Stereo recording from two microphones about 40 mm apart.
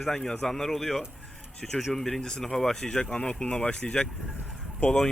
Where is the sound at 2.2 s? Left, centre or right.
Centre.